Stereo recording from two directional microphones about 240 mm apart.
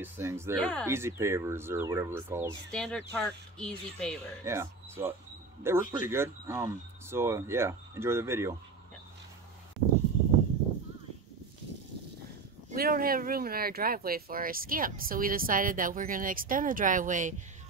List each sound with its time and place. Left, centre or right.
0.0 s speech: centre
0.6 s speech: centre
0.8 s speech: centre
2.7 s speech: centre
4.5 s speech: centre
12.7 s speech: right